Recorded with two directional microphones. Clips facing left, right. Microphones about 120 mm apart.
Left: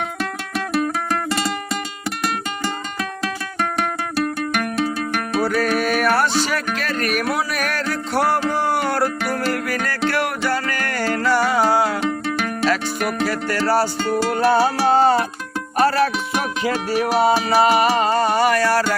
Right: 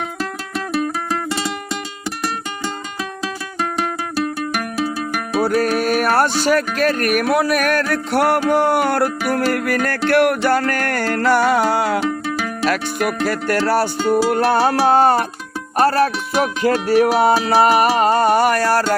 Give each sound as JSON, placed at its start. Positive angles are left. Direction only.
{"t": 0.2, "sound": "music", "side_deg": 0}
{"t": 3.6, "sound": "music", "side_deg": 0}
{"t": 5.4, "sound": "music", "side_deg": -40}
{"t": 11.9, "sound": "music", "side_deg": -5}
{"t": 13.2, "sound": "music", "side_deg": -55}
{"t": 15.8, "sound": "music", "side_deg": -40}
{"t": 16.6, "sound": "music", "side_deg": -50}